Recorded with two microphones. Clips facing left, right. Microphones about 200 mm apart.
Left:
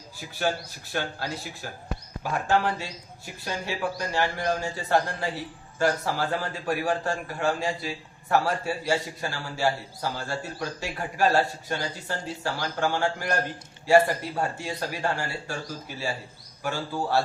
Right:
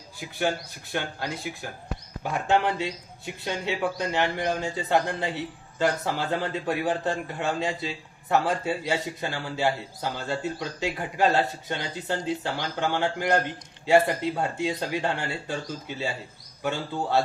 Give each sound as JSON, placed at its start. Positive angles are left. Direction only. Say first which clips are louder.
{"t": 0.9, "sound": "a man's voice", "louder": "even", "side_deg": -20}